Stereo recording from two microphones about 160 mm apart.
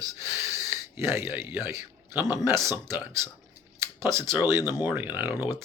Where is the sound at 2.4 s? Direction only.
15° right (ahead or behind).